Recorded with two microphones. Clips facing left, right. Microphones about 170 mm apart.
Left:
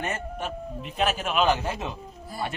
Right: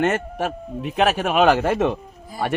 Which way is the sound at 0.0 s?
80° right.